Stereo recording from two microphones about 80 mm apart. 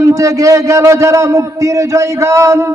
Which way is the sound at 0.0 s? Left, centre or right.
Right.